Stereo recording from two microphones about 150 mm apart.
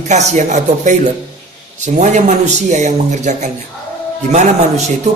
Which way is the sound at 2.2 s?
50° right (ahead or behind).